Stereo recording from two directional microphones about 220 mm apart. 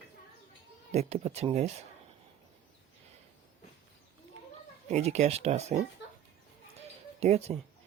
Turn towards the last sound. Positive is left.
turn(degrees=-30)  # may be behind; listen again after turning